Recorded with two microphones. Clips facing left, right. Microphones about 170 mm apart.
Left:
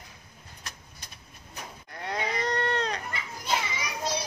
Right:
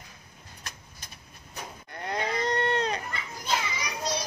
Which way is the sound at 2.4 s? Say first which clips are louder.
Right 2 dB; 20° right (ahead or behind).